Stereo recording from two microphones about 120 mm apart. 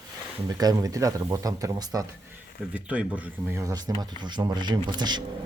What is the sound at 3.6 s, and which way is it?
Speech, 30° right (ahead or behind).